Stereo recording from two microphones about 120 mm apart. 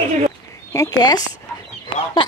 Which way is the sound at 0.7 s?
30° left (ahead or behind).